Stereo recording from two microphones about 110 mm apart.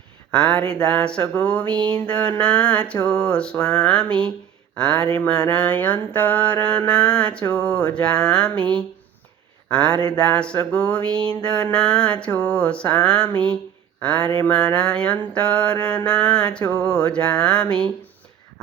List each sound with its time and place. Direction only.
0.3 s mantra: 10° left (ahead or behind)
9.6 s speech: 10° left (ahead or behind)
10.1 s mantra: 10° left (ahead or behind)
14.2 s a sound: 50° right (ahead or behind)
14.4 s mantra: 10° left (ahead or behind)